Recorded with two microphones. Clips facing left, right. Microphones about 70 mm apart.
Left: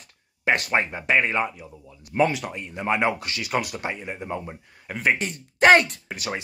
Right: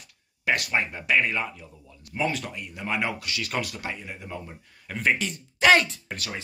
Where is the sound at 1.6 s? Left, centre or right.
Centre.